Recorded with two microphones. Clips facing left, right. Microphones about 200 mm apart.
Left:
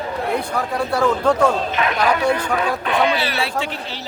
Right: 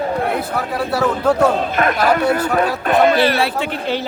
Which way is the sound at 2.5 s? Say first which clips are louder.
Right 4 dB; 45° right (ahead or behind).